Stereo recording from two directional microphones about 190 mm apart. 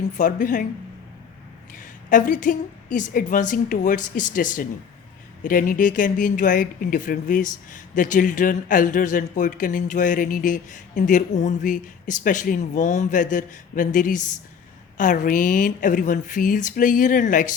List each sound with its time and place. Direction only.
0.2 s speech: 45° left (ahead or behind)
1.7 s speech: 45° left (ahead or behind)